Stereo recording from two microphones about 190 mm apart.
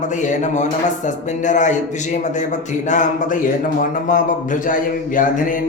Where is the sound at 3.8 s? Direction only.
45° left (ahead or behind).